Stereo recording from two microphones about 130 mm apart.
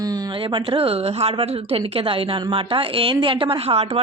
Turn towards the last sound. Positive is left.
turn(degrees=-50)  # may be behind; listen again after turning